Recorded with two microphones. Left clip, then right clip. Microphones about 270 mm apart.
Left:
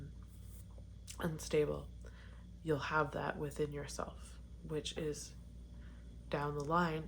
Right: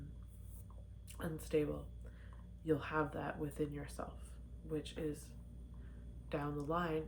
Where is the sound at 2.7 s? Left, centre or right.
Left.